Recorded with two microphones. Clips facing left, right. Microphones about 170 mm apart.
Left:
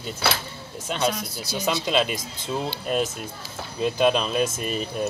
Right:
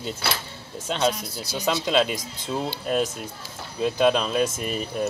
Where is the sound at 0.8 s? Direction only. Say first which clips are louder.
Right 1 dB; 10° left (ahead or behind).